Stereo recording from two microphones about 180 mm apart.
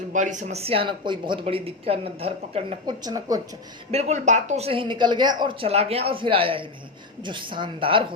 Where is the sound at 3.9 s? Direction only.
40° right (ahead or behind).